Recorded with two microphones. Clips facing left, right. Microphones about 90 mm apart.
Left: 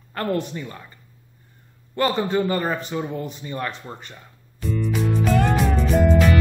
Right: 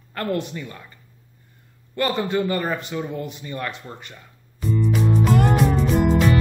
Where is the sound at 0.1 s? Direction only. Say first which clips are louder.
Left 1 dB; 30° left (ahead or behind).